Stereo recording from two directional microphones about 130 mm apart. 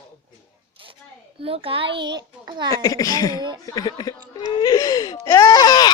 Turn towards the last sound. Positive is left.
turn(degrees=30)  # may be behind; listen again after turning